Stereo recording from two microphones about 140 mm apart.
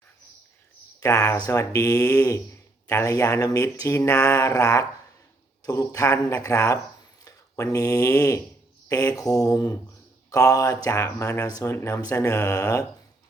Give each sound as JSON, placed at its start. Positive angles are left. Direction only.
{"t": 0.9, "sound": "speech", "side_deg": 20}